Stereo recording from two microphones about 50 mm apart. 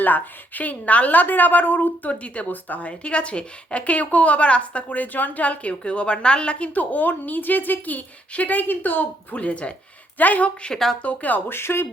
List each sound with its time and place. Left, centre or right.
0.0 s a woman's voice: left
2.2 s a woman's voice: left
11.4 s speech: left